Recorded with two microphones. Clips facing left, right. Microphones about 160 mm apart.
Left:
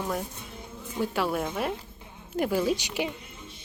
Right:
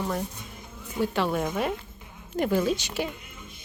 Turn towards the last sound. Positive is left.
turn(degrees=15)  # may be behind; listen again after turning